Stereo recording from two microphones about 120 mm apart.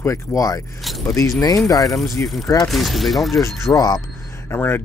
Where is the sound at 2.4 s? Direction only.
25° left (ahead or behind).